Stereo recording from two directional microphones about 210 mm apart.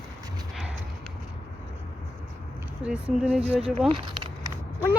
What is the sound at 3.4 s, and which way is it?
Speech, 30° right (ahead or behind).